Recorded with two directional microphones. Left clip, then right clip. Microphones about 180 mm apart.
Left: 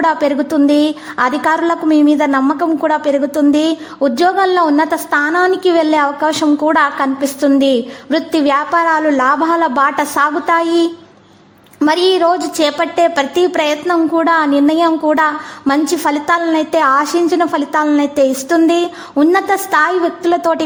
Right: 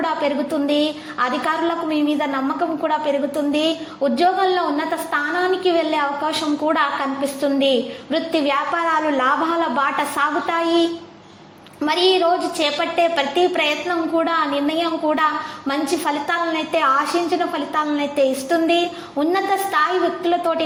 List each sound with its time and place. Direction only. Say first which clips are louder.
0.0 s a woman's voice: left 7 dB; 45° left (ahead or behind)